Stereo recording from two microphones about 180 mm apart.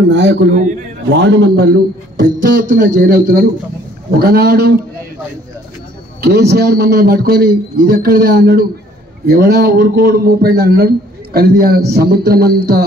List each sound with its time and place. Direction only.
0.1 s a man's voice: 80° right
2.2 s a man's voice: 45° right (ahead or behind)
6.2 s a man's voice: 65° right (ahead or behind)